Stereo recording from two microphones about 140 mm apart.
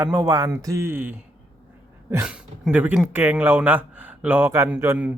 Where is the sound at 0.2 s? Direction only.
25° right (ahead or behind).